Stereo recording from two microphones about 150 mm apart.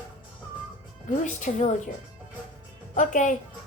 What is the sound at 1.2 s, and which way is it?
Speech, 55° left (ahead or behind).